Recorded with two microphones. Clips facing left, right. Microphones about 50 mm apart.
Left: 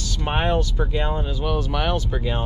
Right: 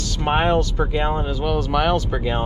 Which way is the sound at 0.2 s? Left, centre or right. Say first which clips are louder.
Right 4 dB; right.